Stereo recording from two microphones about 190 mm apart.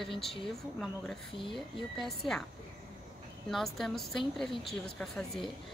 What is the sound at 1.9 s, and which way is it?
Speech, centre (ahead or behind).